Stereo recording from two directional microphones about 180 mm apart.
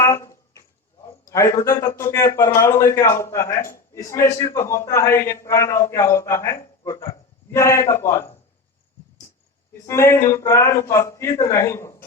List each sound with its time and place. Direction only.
0.0 s a sound: 15° left (ahead or behind)
1.3 s a man's voice: 15° left (ahead or behind)
9.8 s a man's voice: 15° left (ahead or behind)